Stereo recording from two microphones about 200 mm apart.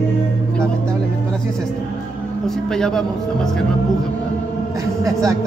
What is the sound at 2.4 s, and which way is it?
Speech, centre (ahead or behind).